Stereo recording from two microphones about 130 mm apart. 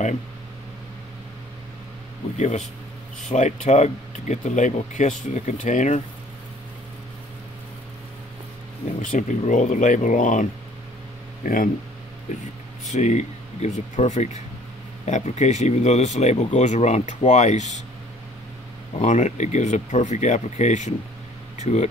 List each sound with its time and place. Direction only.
2.3 s speech: 65° left (ahead or behind)
9.0 s speech: 80° left
12.9 s speech: 65° left (ahead or behind)
18.9 s speech: 60° left (ahead or behind)